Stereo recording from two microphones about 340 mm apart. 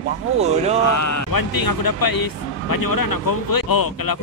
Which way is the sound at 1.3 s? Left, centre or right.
Left.